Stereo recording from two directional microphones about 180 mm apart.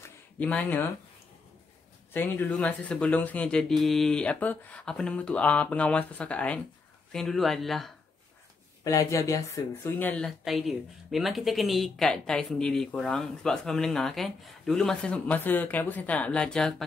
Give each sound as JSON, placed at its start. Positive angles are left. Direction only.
{"t": 0.0, "sound": "a sound", "side_deg": 10}
{"t": 2.1, "sound": "speech", "side_deg": 10}
{"t": 8.8, "sound": "speech", "side_deg": 15}